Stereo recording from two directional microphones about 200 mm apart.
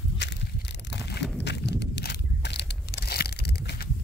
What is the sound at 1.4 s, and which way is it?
Crushing, 55° left (ahead or behind).